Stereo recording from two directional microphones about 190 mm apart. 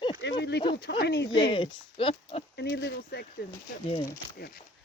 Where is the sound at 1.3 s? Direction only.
25° left (ahead or behind).